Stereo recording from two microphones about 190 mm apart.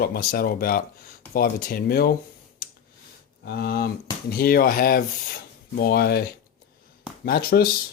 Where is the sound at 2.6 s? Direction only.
55° left (ahead or behind).